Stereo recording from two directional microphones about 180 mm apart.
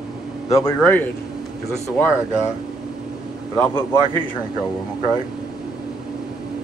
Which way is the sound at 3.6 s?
15° left (ahead or behind).